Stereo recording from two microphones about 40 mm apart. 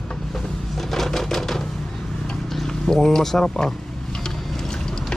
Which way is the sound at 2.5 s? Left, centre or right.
Centre.